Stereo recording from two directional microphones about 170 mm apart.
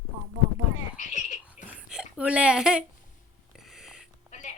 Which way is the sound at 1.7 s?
5° right (ahead or behind).